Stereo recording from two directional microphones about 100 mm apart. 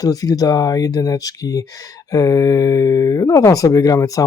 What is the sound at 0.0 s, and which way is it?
Speech, 35° left (ahead or behind).